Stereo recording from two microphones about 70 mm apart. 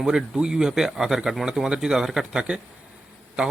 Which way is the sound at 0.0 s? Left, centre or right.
Centre.